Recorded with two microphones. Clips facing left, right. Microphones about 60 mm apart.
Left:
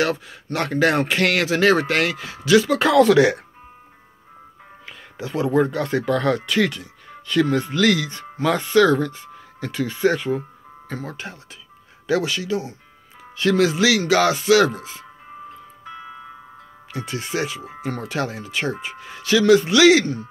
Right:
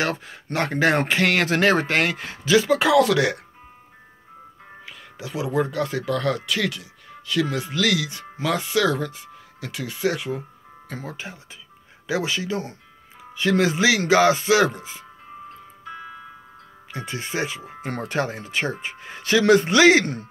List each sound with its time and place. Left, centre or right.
0.0 s speech: right
2.8 s speech: centre
4.8 s speech: centre
11.0 s speech: centre
16.9 s speech: right
17.6 s speech: left
17.8 s speech: right